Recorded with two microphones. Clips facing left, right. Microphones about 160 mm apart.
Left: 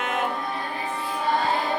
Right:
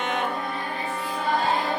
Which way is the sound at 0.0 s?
5° left (ahead or behind).